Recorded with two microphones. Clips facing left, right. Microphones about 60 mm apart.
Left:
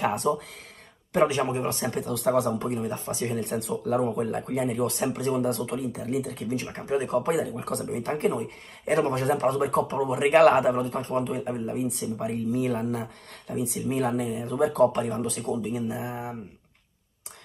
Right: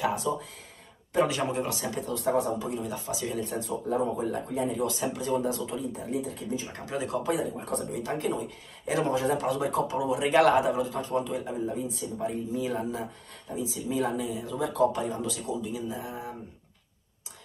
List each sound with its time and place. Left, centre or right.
0.0 s a sound: left
1.2 s speech: left
1.7 s speech: left
2.7 s speech: left
6.7 s a man's voice: left
7.3 s speech: left
7.9 s speech: left
10.7 s a man's voice: left
11.5 s speech: left